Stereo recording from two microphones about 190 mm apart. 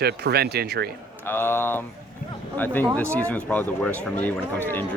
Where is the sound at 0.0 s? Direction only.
55° right (ahead or behind).